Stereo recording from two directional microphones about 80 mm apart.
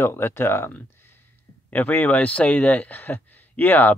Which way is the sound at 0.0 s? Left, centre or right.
Left.